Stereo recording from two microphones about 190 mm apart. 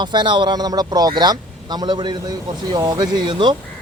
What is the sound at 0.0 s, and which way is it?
A man's voice, 25° right (ahead or behind).